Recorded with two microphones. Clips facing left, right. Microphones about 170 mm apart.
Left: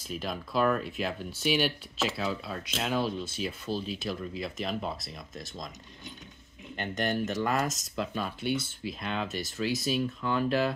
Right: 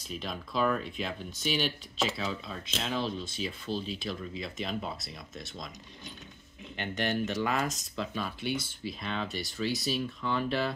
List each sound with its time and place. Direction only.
0.1 s speech: 5° left (ahead or behind)
7.1 s speech: centre (ahead or behind)